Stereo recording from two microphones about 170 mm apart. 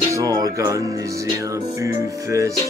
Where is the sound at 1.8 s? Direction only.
20° right (ahead or behind).